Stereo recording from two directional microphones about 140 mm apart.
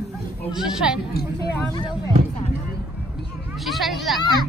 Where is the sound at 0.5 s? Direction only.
5° right (ahead or behind).